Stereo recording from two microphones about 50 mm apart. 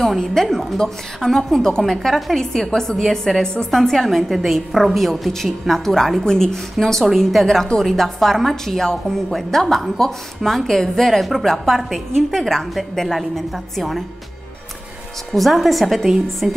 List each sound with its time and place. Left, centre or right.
0.2 s a woman's voice: centre
15.3 s a woman's voice: centre
16.4 s music: centre